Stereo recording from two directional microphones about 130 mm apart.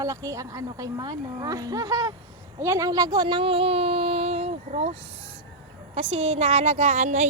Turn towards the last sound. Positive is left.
turn(degrees=-65)  # may be behind; listen again after turning